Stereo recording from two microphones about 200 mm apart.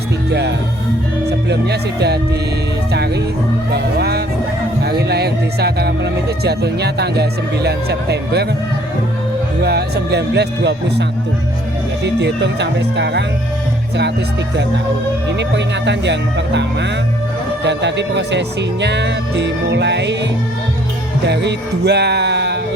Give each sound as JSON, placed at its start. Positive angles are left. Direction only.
{"t": 0.3, "sound": "speech", "side_deg": -60}
{"t": 9.6, "sound": "speech", "side_deg": -55}
{"t": 12.0, "sound": "speech", "side_deg": -60}
{"t": 15.3, "sound": "speech", "side_deg": -60}
{"t": 21.2, "sound": "music", "side_deg": -60}